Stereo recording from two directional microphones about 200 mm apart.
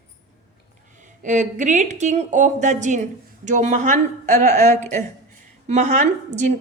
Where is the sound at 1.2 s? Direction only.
40° right (ahead or behind).